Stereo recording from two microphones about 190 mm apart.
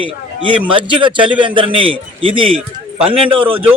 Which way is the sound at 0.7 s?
25° right (ahead or behind).